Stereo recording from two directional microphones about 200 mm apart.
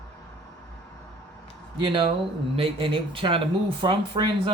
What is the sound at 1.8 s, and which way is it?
Speech, 25° right (ahead or behind).